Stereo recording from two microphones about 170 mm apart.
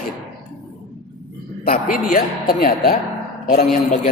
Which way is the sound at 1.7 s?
60° left (ahead or behind).